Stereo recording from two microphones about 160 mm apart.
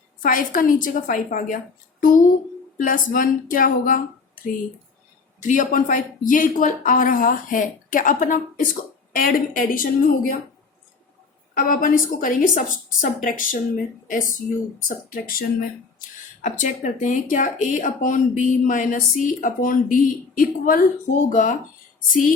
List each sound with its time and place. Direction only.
0.2 s a woman's voice: 60° left (ahead or behind)
5.4 s a woman's voice: 55° left (ahead or behind)
11.5 s a woman's voice: 60° left (ahead or behind)